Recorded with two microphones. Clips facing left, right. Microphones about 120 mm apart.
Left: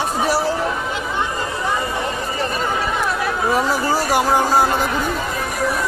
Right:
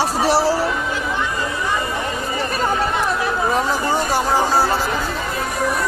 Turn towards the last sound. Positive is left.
turn(degrees=15)  # may be behind; listen again after turning